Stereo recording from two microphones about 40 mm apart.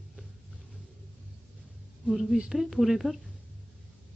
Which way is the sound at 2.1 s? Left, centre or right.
Centre.